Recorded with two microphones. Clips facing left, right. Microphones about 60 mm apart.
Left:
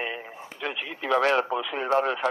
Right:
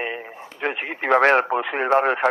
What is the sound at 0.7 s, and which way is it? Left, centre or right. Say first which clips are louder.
Speech: right 6 dB; right.